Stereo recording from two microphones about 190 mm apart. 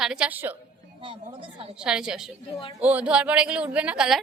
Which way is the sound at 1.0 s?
25° right (ahead or behind).